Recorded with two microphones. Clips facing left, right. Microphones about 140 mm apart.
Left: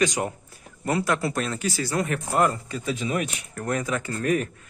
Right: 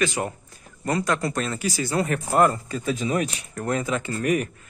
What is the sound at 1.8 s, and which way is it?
Speech, 25° right (ahead or behind).